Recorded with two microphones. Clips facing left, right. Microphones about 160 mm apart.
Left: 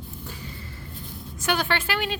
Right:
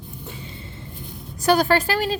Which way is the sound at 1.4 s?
40° right (ahead or behind).